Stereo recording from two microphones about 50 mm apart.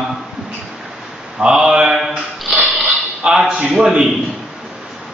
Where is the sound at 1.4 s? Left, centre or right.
Centre.